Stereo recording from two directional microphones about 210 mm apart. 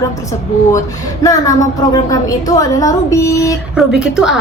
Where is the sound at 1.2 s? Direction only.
15° left (ahead or behind).